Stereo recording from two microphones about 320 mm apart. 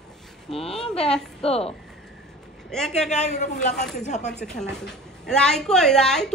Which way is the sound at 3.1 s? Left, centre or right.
Left.